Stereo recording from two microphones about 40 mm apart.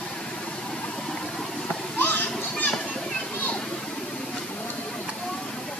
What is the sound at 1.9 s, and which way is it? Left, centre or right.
Children playing, left.